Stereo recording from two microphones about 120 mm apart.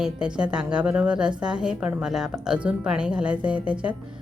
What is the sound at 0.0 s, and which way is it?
A woman's voice, 10° right (ahead or behind).